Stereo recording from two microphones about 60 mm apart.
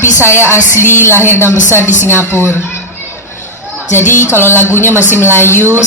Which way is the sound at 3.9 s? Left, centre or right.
Left.